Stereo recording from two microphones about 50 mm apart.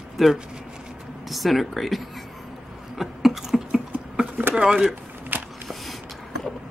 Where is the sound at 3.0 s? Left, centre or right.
Centre.